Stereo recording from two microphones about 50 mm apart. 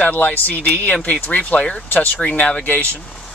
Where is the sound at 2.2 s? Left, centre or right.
Left.